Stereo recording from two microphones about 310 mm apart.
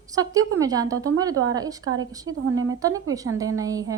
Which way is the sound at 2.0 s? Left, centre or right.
Right.